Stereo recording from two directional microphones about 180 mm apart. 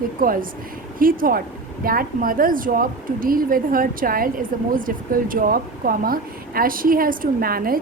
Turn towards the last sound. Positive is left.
turn(degrees=-55)  # may be behind; listen again after turning